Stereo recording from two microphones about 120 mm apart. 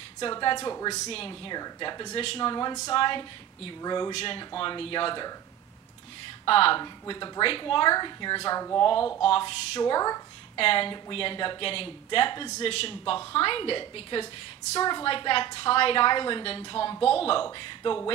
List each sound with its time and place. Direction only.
0.2 s a woman's voice: 40° left (ahead or behind)
1.0 s speech: 50° left (ahead or behind)
1.5 s a woman's voice: 35° left (ahead or behind)
2.9 s a woman's voice: 45° left (ahead or behind)
4.1 s speech: 55° left (ahead or behind)
4.4 s speech: 40° left (ahead or behind)
6.4 s a woman's voice: 50° left (ahead or behind); by 8.8 s 30° left (ahead or behind)
9.2 s a woman's voice: 50° left (ahead or behind); by 10.2 s 30° left (ahead or behind)
10.5 s speech: 50° left (ahead or behind)
12.5 s speech: 55° left (ahead or behind)
14.8 s a woman's voice: 35° left (ahead or behind)
15.0 s speech: 45° left (ahead or behind)
17.0 s speech: 55° left (ahead or behind)